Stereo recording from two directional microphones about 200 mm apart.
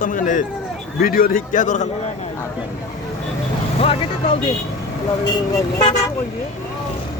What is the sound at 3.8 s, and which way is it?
Speech, 30° left (ahead or behind).